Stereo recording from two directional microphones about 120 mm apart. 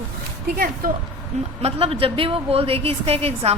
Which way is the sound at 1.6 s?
55° right (ahead or behind).